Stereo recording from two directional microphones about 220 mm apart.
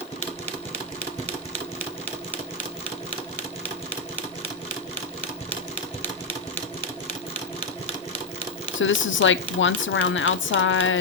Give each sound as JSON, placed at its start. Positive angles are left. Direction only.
{"t": 8.8, "sound": "a woman's voice", "side_deg": 60}